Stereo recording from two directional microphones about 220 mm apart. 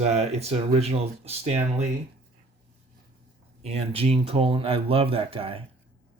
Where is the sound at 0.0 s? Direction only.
30° right (ahead or behind).